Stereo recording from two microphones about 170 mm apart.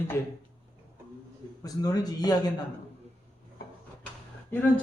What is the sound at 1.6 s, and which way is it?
Speech, 20° left (ahead or behind).